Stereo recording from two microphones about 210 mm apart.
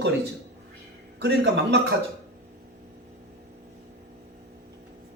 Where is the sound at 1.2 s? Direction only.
55° right (ahead or behind).